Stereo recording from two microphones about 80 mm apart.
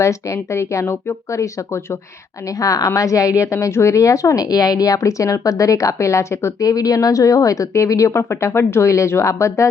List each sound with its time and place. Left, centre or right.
0.0 s speech: left
2.6 s a woman's voice: left
6.7 s speech: left